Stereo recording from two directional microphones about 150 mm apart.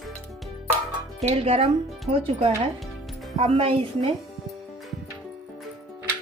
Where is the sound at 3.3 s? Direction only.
45° right (ahead or behind).